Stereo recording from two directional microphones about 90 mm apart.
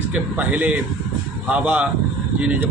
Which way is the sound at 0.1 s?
20° right (ahead or behind).